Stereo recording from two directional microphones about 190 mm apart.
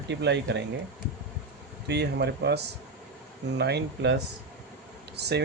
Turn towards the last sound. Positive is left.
turn(degrees=-60)  # may be behind; listen again after turning